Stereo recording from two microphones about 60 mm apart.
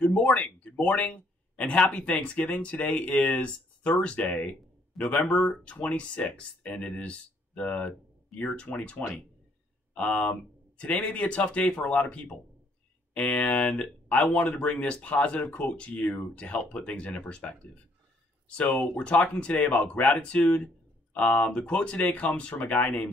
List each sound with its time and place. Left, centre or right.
0.0 s speech: left